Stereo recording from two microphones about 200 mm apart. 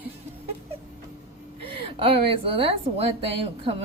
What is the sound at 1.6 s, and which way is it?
A woman's voice, 25° right (ahead or behind).